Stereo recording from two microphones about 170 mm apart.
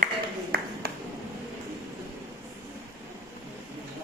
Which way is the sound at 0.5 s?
65° right (ahead or behind).